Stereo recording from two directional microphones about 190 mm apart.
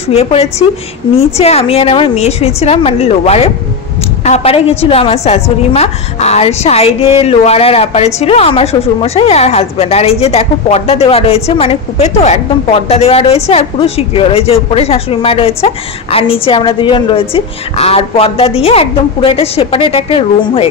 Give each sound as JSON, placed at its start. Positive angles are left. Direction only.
{"t": 0.1, "sound": "a woman's voice", "side_deg": 35}